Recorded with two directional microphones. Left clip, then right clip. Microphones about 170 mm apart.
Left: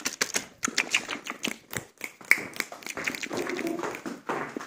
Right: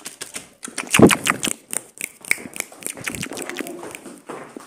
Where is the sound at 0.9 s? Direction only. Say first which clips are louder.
Right 15 dB; 90° right.